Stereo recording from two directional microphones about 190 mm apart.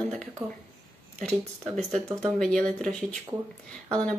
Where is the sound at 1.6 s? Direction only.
35° right (ahead or behind).